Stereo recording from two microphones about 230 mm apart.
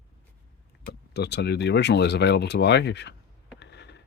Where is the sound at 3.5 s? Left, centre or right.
Left.